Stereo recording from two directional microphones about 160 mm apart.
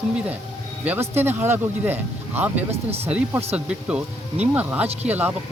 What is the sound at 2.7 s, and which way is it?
Speech, 40° right (ahead or behind).